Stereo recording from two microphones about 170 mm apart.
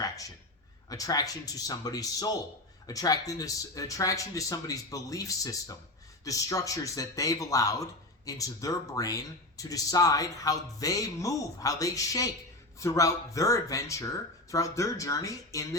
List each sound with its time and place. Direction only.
0.9 s speech: 20° left (ahead or behind)